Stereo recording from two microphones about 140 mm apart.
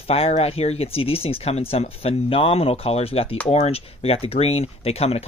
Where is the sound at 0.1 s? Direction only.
45° left (ahead or behind).